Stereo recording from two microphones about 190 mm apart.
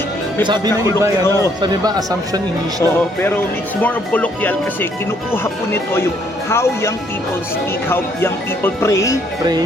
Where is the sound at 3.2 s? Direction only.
10° left (ahead or behind).